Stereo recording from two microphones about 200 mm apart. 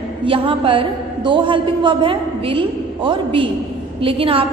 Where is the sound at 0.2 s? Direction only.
25° right (ahead or behind).